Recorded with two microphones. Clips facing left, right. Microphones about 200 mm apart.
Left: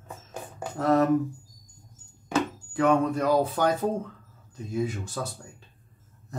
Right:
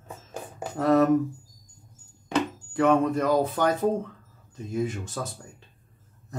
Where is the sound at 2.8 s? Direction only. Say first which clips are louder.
Right 1 dB; 5° right (ahead or behind).